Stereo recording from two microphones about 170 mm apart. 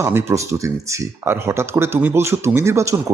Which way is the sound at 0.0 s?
15° right (ahead or behind).